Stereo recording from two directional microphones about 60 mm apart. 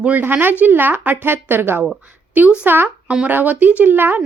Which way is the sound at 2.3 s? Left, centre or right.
Right.